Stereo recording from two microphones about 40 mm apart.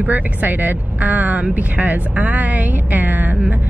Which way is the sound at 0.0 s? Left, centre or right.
Right.